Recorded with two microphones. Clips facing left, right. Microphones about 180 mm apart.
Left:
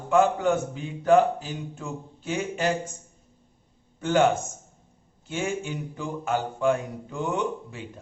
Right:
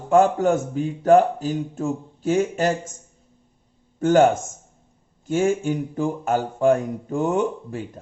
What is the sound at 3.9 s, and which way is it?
A man's voice, 45° right (ahead or behind).